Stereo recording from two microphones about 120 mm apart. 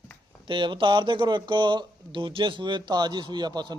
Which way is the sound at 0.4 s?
45° right (ahead or behind).